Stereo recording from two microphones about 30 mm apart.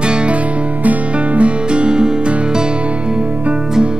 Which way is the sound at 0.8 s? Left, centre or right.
Right.